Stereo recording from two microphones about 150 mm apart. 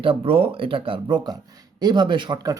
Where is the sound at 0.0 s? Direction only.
35° right (ahead or behind).